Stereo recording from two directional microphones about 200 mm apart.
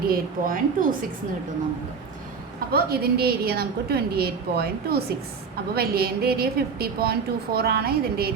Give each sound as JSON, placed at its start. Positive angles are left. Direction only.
{"t": 0.1, "sound": "a woman's voice", "side_deg": -45}
{"t": 2.7, "sound": "a woman's voice", "side_deg": -50}